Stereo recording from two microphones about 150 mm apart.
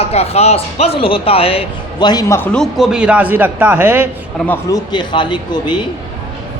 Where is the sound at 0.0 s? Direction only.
45° left (ahead or behind).